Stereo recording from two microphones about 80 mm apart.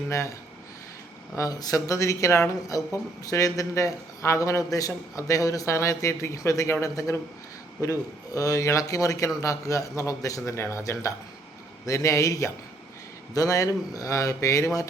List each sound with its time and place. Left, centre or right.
0.1 s a man's voice: left
1.4 s a man's voice: left